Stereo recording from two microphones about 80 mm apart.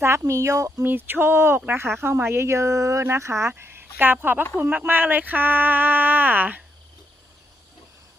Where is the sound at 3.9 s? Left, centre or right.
Right.